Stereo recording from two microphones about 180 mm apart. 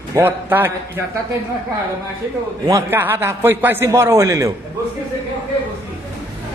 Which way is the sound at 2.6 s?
15° right (ahead or behind).